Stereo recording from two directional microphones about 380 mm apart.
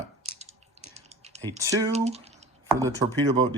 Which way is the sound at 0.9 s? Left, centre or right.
Centre.